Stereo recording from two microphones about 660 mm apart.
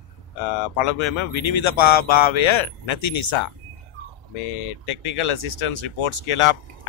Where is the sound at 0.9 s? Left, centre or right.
Left.